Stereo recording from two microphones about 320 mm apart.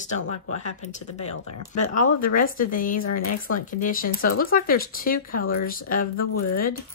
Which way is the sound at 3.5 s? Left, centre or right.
Left.